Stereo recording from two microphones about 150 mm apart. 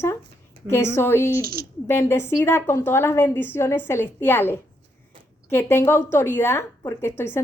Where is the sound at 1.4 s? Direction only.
85° right.